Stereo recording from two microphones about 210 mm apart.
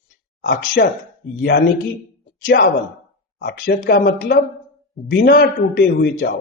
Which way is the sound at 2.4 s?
45° left (ahead or behind).